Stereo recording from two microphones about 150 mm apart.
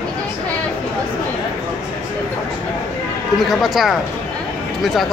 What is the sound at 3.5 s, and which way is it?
Speech, centre (ahead or behind).